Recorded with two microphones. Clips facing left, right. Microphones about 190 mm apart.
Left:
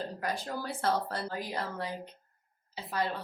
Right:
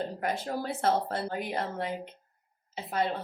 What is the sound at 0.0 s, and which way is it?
A woman's voice, 25° right (ahead or behind).